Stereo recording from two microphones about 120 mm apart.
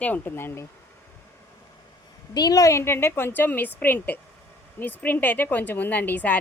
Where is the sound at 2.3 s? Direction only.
30° left (ahead or behind).